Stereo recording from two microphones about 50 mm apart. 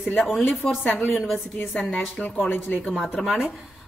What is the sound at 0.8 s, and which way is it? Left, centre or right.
Speech, left.